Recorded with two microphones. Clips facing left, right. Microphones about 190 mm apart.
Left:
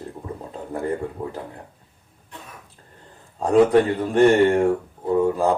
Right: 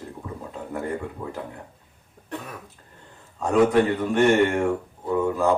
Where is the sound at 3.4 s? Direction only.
35° left (ahead or behind).